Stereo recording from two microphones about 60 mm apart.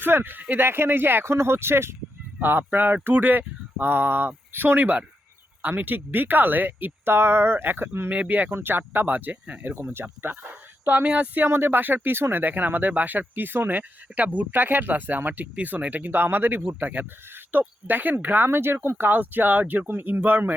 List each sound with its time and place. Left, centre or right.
0.0 s speech: right
2.4 s speech: right
8.1 s speech: right
9.8 s speech: right
11.1 s speech: right
11.4 s speech: right